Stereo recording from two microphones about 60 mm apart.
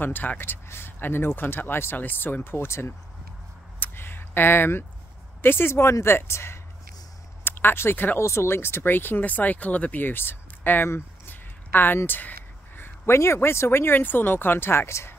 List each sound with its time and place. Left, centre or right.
0.0 s speech: left
3.8 s a sound: left
5.4 s speech: left
7.4 s speech: left
8.2 s speech: left
11.2 s a sound: left
12.1 s speech: left